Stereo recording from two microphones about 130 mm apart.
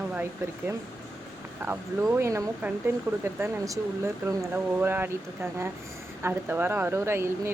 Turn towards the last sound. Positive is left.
turn(degrees=-20)  # may be behind; listen again after turning